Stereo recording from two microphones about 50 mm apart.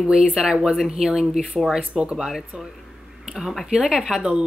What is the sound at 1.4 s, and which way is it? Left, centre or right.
Speech, centre.